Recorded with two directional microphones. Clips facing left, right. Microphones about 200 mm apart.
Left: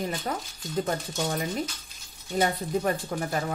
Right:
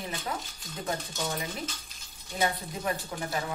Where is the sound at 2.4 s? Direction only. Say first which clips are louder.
Left 5 dB; 45° left (ahead or behind).